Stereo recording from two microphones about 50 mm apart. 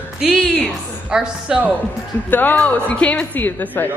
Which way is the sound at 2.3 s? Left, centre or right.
Left.